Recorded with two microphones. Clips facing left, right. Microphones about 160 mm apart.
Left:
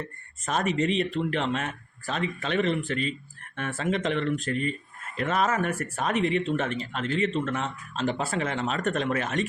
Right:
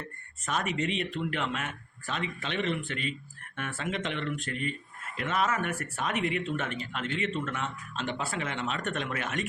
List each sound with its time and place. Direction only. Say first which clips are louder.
0.4 s speech: left 5 dB; 35° left (ahead or behind)